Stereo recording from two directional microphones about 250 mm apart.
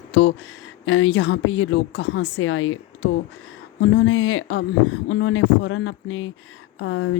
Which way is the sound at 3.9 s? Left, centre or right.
Left.